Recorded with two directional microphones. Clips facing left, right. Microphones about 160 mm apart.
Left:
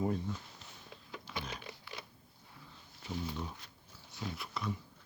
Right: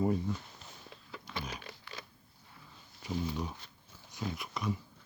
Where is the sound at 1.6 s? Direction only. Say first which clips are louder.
Even; 10° left (ahead or behind).